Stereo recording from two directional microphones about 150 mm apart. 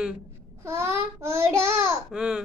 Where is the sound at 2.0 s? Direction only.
5° right (ahead or behind).